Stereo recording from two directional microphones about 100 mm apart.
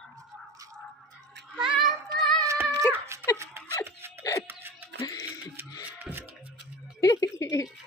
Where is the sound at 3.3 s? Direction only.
30° right (ahead or behind).